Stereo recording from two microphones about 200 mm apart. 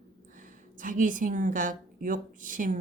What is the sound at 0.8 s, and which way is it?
A woman's voice, 40° right (ahead or behind).